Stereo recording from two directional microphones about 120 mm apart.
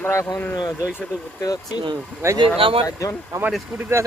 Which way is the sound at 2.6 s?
50° right (ahead or behind).